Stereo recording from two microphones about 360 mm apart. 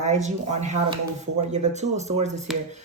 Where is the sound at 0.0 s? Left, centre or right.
Centre.